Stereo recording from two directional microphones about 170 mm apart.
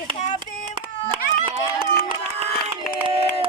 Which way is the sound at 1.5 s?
30° right (ahead or behind).